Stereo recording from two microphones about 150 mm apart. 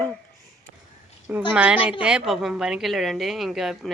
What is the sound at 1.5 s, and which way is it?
A woman's voice, 10° right (ahead or behind).